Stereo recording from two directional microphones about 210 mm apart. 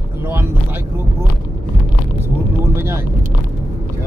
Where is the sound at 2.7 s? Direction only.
10° right (ahead or behind).